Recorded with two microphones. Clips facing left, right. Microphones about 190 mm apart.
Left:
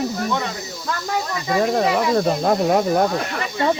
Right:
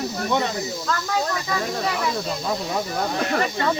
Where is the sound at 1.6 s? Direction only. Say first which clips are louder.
Left 9 dB; 60° left (ahead or behind).